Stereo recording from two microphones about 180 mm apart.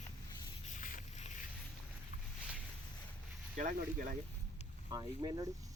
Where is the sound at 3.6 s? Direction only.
45° right (ahead or behind).